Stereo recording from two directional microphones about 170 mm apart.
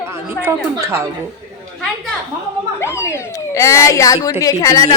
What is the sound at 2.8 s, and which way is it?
A child's voice, 15° left (ahead or behind).